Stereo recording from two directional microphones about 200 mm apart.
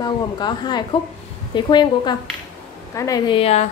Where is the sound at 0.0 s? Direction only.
20° left (ahead or behind).